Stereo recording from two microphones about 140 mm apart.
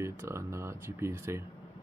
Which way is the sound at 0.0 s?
20° right (ahead or behind).